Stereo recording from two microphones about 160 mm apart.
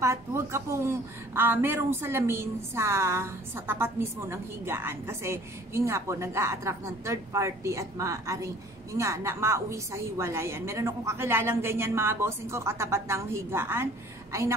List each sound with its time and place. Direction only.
0.0 s a woman's voice: 15° right (ahead or behind)